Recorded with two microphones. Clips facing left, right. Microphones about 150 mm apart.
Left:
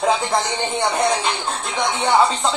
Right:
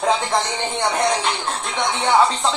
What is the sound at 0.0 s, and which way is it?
Speech, centre (ahead or behind).